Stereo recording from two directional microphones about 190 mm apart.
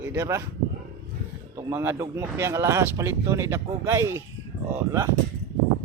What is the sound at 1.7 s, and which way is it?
Speech, 15° right (ahead or behind).